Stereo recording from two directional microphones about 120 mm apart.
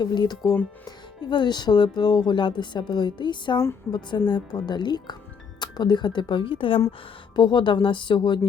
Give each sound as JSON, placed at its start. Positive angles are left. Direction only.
{"t": 0.0, "sound": "speech", "side_deg": 40}